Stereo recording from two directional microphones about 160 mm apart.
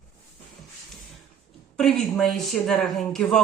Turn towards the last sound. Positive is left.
turn(degrees=5)  # may be behind; listen again after turning